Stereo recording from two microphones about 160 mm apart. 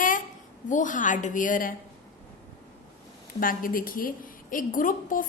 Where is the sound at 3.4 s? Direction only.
60° left (ahead or behind).